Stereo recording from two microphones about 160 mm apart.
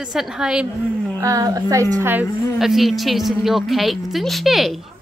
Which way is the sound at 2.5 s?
Centre (ahead or behind).